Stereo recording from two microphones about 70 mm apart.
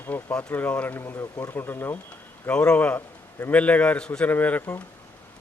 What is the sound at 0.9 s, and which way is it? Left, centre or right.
Speech, left.